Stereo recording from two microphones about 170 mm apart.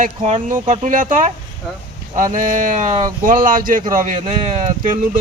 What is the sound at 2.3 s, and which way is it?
Speech, 50° right (ahead or behind).